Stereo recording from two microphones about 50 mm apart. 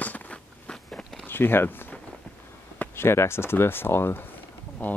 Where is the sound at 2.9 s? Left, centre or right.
Left.